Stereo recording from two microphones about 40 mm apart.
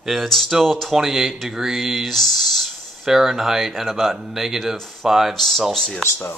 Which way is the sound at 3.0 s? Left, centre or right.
Centre.